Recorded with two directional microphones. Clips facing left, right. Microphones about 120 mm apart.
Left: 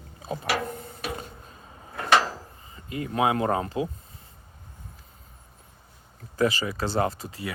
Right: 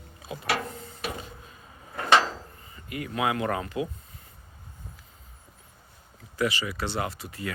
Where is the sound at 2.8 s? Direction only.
25° left (ahead or behind).